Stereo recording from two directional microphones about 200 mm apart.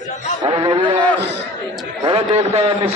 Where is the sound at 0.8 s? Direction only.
5° left (ahead or behind).